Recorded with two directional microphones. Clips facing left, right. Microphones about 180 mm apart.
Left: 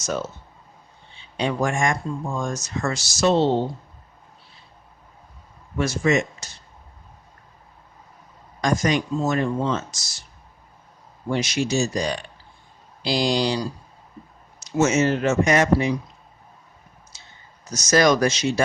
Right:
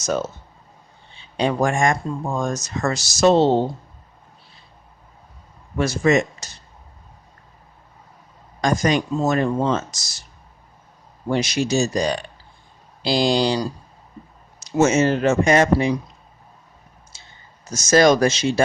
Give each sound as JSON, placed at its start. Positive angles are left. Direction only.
{"t": 0.0, "sound": "speech", "side_deg": -40}
{"t": 1.4, "sound": "speech", "side_deg": -35}
{"t": 5.7, "sound": "speech", "side_deg": -35}
{"t": 8.6, "sound": "speech", "side_deg": -35}
{"t": 11.3, "sound": "speech", "side_deg": -35}
{"t": 14.8, "sound": "speech", "side_deg": -30}
{"t": 17.1, "sound": "clicking", "side_deg": -25}
{"t": 17.7, "sound": "speech", "side_deg": -25}